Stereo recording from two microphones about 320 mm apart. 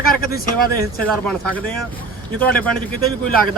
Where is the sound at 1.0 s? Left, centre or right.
Centre.